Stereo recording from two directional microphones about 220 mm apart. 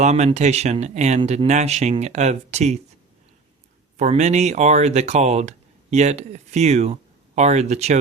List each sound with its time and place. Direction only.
0.0 s speech: 30° right (ahead or behind)
3.9 s speech: 30° right (ahead or behind)